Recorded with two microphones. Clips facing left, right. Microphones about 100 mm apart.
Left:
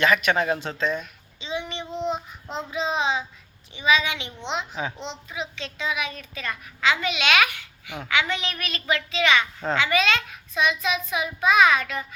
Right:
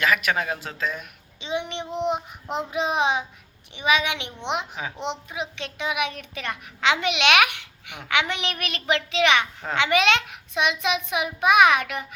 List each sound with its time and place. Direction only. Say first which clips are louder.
0.0 s speech: left 2 dB; 5° right (ahead or behind)
1.4 s child singing: right 2 dB; 60° right (ahead or behind)
2.1 s child singing: right 3 dB; 15° right (ahead or behind)
2.6 s child singing: right 1 dB; 60° right (ahead or behind)
5.0 s a child's voice: right 3 dB; 60° right (ahead or behind)
11.0 s child singing: right 1 dB; 65° right (ahead or behind)